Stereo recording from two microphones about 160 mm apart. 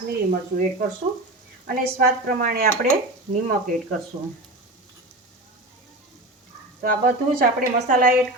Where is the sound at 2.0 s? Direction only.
65° right (ahead or behind).